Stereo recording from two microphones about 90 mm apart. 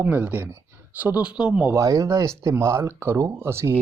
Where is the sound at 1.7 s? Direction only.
40° right (ahead or behind).